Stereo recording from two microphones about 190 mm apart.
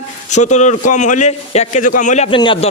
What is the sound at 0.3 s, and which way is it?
A man's voice, 40° left (ahead or behind).